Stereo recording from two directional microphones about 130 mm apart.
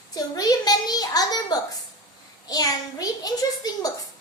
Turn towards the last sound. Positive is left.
turn(degrees=30)  # may be behind; listen again after turning